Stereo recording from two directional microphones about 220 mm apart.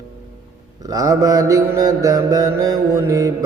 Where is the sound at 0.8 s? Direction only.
15° right (ahead or behind).